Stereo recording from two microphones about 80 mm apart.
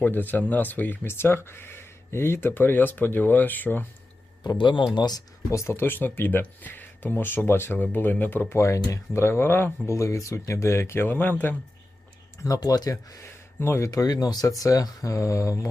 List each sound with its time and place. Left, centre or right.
0.0 s speech: left
4.4 s a man's voice: left
4.9 s speech: left
5.5 s speech: left
8.5 s speech: left
12.4 s speech: left
13.6 s speech: left
13.9 s speech: left